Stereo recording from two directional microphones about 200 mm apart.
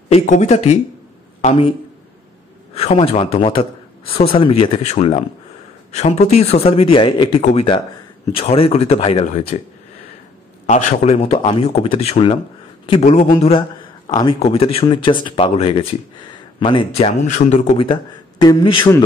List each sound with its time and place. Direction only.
0.1 s speech: 35° left (ahead or behind)
2.7 s speech: 30° left (ahead or behind)
10.7 s speech: 35° left (ahead or behind)